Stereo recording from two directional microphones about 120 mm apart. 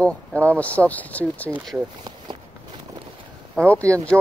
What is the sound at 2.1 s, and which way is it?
Walk, 35° right (ahead or behind).